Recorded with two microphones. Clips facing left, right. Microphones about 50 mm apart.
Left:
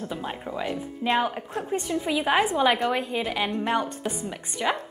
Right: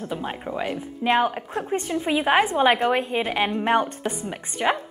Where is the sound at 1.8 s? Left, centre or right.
Right.